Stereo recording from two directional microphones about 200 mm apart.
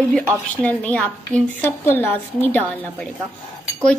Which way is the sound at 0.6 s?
5° left (ahead or behind).